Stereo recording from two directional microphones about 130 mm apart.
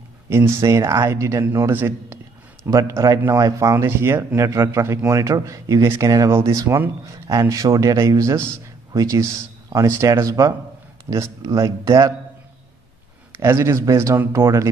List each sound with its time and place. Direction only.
0.3 s speech: 20° right (ahead or behind)
13.4 s speech: 20° right (ahead or behind)